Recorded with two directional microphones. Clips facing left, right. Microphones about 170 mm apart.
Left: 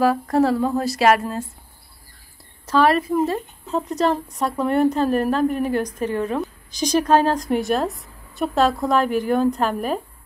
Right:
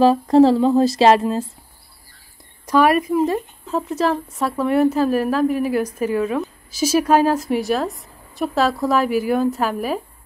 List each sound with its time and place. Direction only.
0.0 s speech: 25° right (ahead or behind)
2.6 s a woman's voice: 15° right (ahead or behind)
3.7 s a woman's voice: centre (ahead or behind)